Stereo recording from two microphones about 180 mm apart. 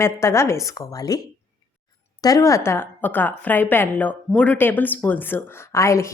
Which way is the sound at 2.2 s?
20° left (ahead or behind).